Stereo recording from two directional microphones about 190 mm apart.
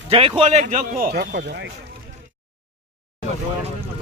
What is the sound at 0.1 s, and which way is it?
Speech, 30° right (ahead or behind).